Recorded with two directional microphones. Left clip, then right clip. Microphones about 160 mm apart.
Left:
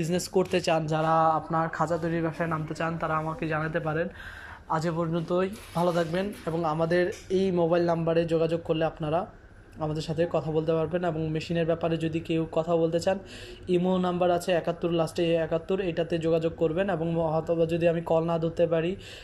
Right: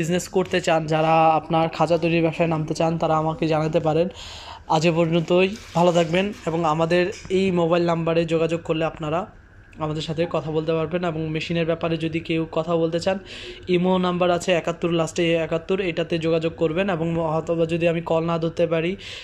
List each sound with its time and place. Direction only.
0.0 s speech: 5° left (ahead or behind)
1.5 s a man's voice: 35° right (ahead or behind); by 18.9 s 5° right (ahead or behind)